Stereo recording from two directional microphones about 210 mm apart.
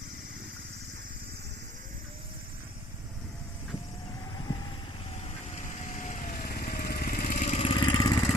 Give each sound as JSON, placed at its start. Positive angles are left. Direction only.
{"t": 4.4, "sound": "vehicle", "side_deg": 20}
{"t": 5.1, "sound": "vehicle", "side_deg": 35}